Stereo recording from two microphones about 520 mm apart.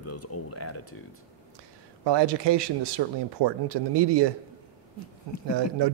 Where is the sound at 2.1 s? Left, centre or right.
Right.